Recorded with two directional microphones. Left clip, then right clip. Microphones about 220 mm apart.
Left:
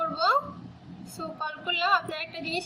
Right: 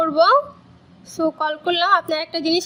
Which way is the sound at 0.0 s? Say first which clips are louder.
Right 10 dB; 45° right (ahead or behind).